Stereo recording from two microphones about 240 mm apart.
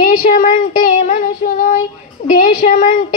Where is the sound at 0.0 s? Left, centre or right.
Left.